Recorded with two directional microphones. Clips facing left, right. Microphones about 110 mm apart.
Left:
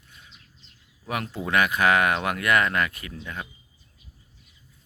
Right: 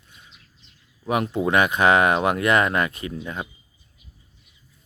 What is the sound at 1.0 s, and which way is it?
Speech, 20° right (ahead or behind).